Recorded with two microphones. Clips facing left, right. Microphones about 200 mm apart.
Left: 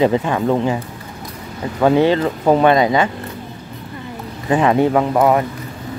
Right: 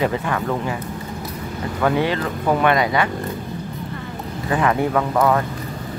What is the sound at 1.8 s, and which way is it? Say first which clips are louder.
Speech: left 7 dB; 30° left (ahead or behind).